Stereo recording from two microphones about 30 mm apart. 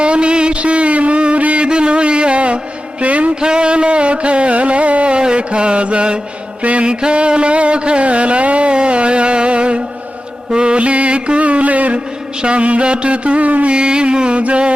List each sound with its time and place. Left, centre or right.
0.0 s a sound: right
1.6 s a sound: right
3.0 s music: right
3.4 s music: right
5.2 s mantra: right
6.6 s mantra: right
6.8 s a sound: right
10.5 s mantra: right
12.4 s music: right
13.7 s mantra: right